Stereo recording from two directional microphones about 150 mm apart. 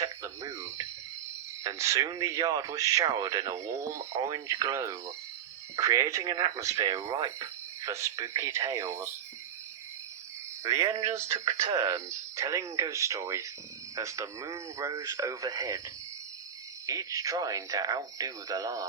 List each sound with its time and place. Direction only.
0.0 s a sound: 20° right (ahead or behind)
1.6 s speech: 20° right (ahead or behind)
10.6 s speech: 20° right (ahead or behind)
16.8 s speech: 20° right (ahead or behind)